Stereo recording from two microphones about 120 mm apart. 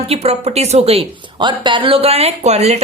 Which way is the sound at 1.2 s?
40° right (ahead or behind).